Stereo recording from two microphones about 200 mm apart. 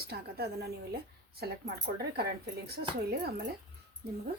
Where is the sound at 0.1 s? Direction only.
50° right (ahead or behind).